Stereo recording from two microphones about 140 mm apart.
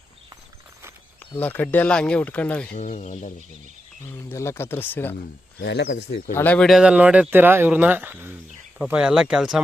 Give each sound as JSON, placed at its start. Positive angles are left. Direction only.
{"t": 1.4, "sound": "speech", "side_deg": 10}
{"t": 2.7, "sound": "speech", "side_deg": 55}
{"t": 4.3, "sound": "speech", "side_deg": 20}
{"t": 5.5, "sound": "speech", "side_deg": 90}
{"t": 6.3, "sound": "speech", "side_deg": 10}
{"t": 6.7, "sound": "speech", "side_deg": -5}